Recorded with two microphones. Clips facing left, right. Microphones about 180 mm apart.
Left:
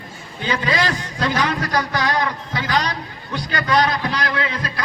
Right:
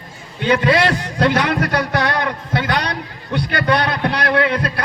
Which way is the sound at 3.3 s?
60° right (ahead or behind).